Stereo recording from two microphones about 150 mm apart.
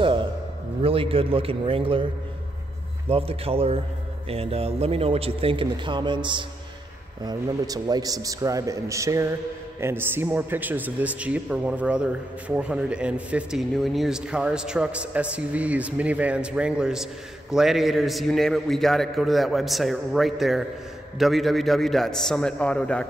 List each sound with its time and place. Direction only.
0.0 s a sound: 35° right (ahead or behind)
0.8 s a man's voice: 40° right (ahead or behind)
3.1 s a man's voice: 40° right (ahead or behind); by 23.0 s 5° left (ahead or behind)